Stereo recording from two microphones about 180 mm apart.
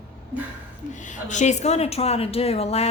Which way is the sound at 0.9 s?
45° left (ahead or behind).